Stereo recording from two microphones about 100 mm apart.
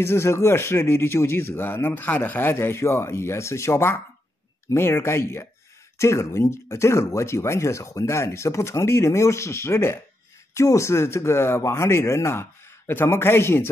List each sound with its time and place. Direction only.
0.0 s speech: 25° left (ahead or behind)